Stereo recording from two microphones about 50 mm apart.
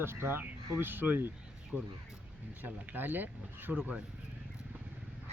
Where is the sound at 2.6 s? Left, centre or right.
Right.